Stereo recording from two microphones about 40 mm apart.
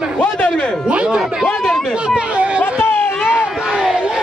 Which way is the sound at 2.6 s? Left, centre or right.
Left.